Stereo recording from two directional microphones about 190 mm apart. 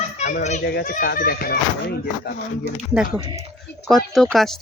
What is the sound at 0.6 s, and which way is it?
Speech, 55° left (ahead or behind).